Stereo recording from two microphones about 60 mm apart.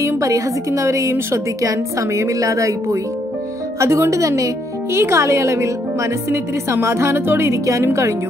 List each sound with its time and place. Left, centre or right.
0.2 s speech: right
4.9 s speech: right